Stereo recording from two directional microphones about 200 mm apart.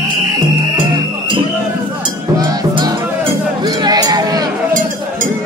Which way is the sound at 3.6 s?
20° right (ahead or behind).